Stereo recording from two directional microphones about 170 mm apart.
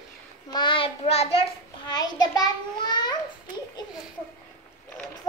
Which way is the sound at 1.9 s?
25° left (ahead or behind).